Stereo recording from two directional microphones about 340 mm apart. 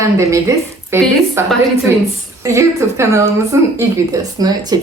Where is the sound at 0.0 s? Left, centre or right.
Centre.